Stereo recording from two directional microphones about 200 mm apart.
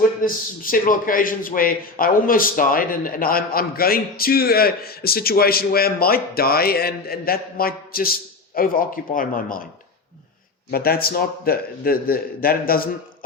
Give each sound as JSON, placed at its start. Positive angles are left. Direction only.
{"t": 0.2, "sound": "a man's voice", "side_deg": 45}
{"t": 10.7, "sound": "a man's voice", "side_deg": 50}